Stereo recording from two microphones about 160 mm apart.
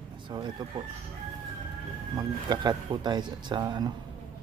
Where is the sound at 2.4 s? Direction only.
25° right (ahead or behind).